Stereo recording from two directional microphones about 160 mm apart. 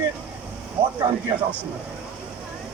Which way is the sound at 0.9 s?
25° right (ahead or behind).